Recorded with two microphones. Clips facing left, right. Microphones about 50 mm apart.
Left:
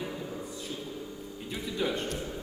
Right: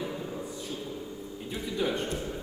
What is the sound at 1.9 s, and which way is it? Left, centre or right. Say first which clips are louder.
Speech: right 2 dB; right.